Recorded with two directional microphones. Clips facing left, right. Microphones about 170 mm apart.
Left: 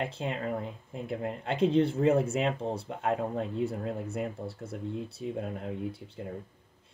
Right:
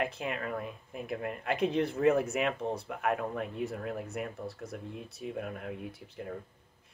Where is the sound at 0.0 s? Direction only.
30° left (ahead or behind).